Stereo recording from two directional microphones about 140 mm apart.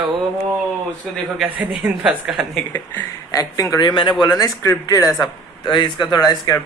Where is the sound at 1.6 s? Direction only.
10° right (ahead or behind).